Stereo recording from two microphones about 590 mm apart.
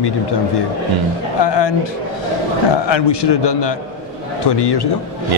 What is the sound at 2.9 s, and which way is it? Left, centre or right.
A man's voice, left.